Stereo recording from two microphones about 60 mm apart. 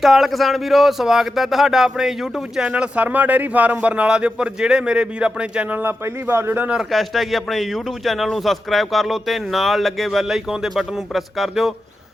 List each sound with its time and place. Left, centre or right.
0.0 s speech: centre
2.6 s a man's voice: right
5.7 s a man's voice: right
6.9 s speech: centre